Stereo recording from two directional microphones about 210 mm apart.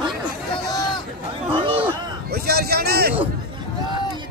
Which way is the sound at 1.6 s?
25° right (ahead or behind).